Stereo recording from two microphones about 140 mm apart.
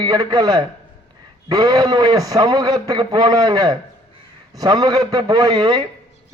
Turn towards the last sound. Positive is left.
turn(degrees=-30)  # may be behind; listen again after turning